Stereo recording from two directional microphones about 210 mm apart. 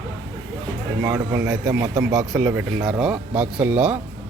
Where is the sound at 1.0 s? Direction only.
15° right (ahead or behind).